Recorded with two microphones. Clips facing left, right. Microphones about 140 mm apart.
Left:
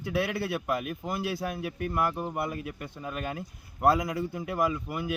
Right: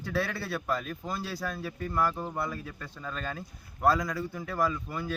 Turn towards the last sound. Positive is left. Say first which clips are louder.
# left 2 dB
turn(degrees=15)  # may be behind; listen again after turning